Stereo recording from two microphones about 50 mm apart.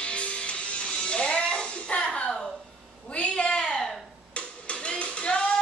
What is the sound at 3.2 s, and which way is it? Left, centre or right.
Cat, left.